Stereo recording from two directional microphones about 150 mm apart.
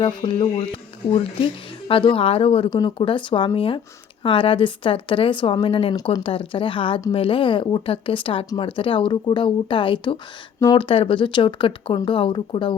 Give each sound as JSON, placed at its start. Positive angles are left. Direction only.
{"t": 0.0, "sound": "a woman's voice", "side_deg": 35}
{"t": 10.8, "sound": "a woman's voice", "side_deg": 35}